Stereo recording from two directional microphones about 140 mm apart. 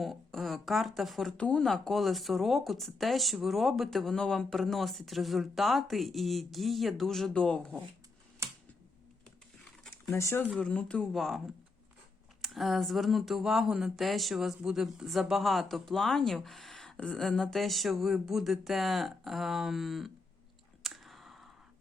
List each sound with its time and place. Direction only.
0.0 s speech: centre (ahead or behind)
8.4 s computer keyboard: 20° right (ahead or behind)
10.2 s speech: 20° left (ahead or behind)
10.5 s a woman's voice: 10° left (ahead or behind)
20.8 s clicking: centre (ahead or behind)